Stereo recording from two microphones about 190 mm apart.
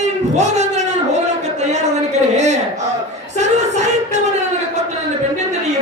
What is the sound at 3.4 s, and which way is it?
Music, 35° right (ahead or behind).